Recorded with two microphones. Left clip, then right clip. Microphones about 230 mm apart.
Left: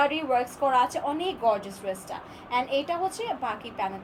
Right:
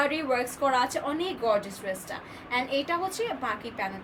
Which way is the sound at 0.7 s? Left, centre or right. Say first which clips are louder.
Left 4 dB; centre.